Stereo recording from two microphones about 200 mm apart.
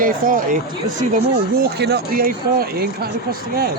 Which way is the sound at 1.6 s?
55° right (ahead or behind).